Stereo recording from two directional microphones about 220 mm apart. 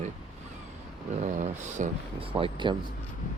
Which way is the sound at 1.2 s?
35° right (ahead or behind).